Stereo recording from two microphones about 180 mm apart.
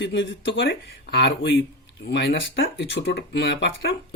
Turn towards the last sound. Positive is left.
turn(degrees=75)  # may be behind; listen again after turning